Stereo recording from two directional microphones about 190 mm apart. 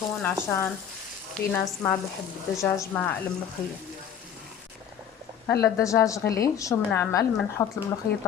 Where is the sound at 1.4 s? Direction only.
60° left (ahead or behind).